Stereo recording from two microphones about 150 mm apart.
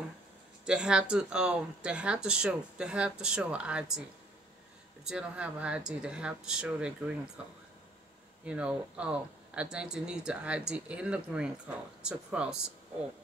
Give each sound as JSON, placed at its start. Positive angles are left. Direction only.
{"t": 0.7, "sound": "speech", "side_deg": -5}
{"t": 5.0, "sound": "speech", "side_deg": -5}
{"t": 8.5, "sound": "speech", "side_deg": -5}